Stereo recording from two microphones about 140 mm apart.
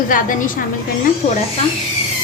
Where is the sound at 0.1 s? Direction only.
70° left (ahead or behind).